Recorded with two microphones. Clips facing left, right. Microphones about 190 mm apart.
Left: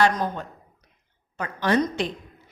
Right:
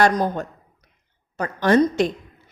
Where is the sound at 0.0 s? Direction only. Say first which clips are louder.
Right 3 dB; 40° right (ahead or behind).